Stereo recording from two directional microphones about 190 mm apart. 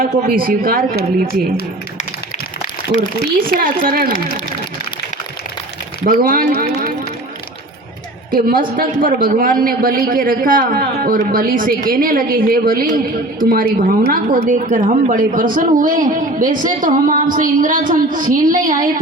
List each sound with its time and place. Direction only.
0.0 s a woman's voice: 50° right (ahead or behind)
3.4 s a woman's voice: 50° right (ahead or behind)
6.1 s a woman's voice: 45° right (ahead or behind)
8.4 s a woman's voice: 50° right (ahead or behind)